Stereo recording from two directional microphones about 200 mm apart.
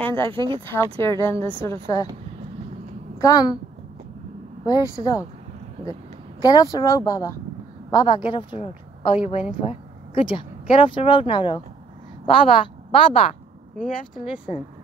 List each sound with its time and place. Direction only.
0.0 s speech: 10° left (ahead or behind)
0.3 s speech: 25° right (ahead or behind)
0.7 s speech: 15° left (ahead or behind)
3.2 s a woman's voice: 15° left (ahead or behind)
4.6 s speech: 15° left (ahead or behind)
6.4 s a woman's voice: 20° left (ahead or behind)
14.2 s speech: 5° right (ahead or behind)